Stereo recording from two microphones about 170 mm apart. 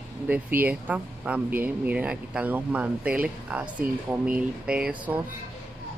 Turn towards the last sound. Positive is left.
turn(degrees=-10)  # may be behind; listen again after turning